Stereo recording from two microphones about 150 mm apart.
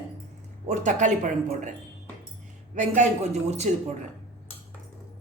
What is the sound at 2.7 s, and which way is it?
Speech, 55° right (ahead or behind).